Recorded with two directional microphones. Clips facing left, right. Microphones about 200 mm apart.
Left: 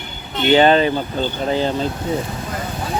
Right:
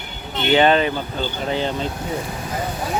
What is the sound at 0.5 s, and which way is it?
Speech, 35° left (ahead or behind).